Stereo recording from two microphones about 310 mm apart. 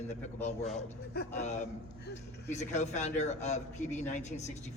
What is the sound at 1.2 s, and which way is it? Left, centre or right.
Speech, left.